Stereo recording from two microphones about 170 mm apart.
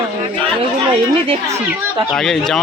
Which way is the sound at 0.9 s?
35° right (ahead or behind).